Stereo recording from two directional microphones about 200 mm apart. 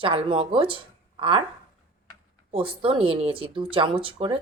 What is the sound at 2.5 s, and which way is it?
A woman's voice, 25° right (ahead or behind).